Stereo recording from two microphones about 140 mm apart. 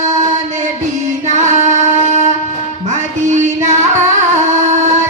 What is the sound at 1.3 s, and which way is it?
Music, 55° right (ahead or behind).